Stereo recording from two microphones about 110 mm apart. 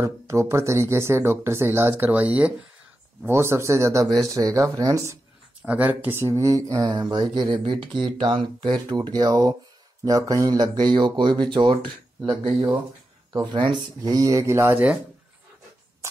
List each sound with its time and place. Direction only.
0.0 s speech: 25° right (ahead or behind)
3.3 s speech: 25° right (ahead or behind)
5.6 s speech: 15° right (ahead or behind); by 11.9 s 50° right (ahead or behind)
13.3 s speech: 45° right (ahead or behind); by 14.9 s 20° right (ahead or behind)